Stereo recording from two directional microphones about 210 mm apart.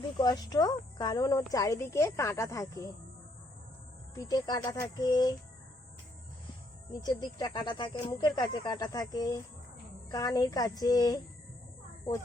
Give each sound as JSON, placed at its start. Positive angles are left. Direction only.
{"t": 0.2, "sound": "speech", "side_deg": 20}
{"t": 4.1, "sound": "speech", "side_deg": 15}
{"t": 7.0, "sound": "speech", "side_deg": 20}